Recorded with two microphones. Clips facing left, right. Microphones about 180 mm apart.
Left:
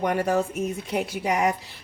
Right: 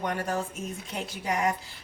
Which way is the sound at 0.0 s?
65° left (ahead or behind).